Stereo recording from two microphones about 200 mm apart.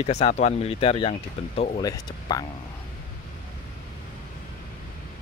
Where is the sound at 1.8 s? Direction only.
20° left (ahead or behind).